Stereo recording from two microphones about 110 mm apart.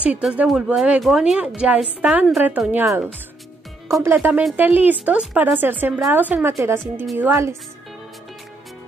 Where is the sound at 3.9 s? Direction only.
20° right (ahead or behind).